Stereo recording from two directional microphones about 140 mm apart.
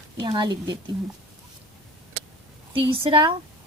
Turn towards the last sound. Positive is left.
turn(degrees=-35)  # may be behind; listen again after turning